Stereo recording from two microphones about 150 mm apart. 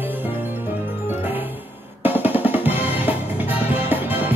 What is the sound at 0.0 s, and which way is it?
Music, 10° right (ahead or behind).